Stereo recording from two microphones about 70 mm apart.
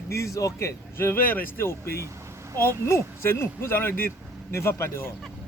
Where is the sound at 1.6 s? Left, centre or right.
Left.